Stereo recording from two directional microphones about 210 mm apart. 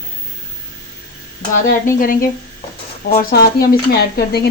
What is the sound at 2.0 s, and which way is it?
A woman's voice, 40° left (ahead or behind).